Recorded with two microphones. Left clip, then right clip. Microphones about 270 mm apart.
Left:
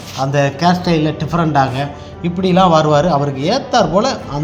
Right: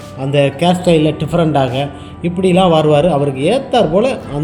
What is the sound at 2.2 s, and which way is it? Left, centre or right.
Speech, left.